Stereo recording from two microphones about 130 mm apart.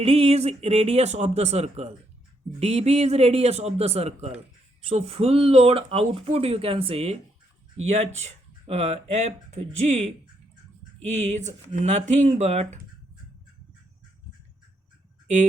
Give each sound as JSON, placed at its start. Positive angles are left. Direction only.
{"t": 0.0, "sound": "speech", "side_deg": -50}